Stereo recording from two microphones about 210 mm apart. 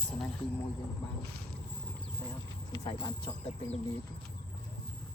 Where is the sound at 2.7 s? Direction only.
20° left (ahead or behind).